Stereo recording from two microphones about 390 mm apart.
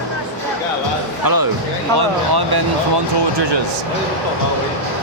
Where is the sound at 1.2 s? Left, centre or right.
Right.